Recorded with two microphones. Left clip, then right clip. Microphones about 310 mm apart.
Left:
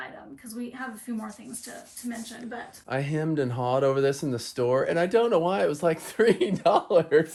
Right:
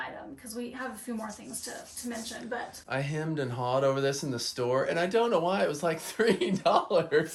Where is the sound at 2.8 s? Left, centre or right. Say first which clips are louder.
Left 6 dB; left.